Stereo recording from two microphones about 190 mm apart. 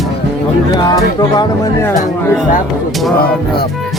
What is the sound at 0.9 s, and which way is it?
Speech, 20° left (ahead or behind).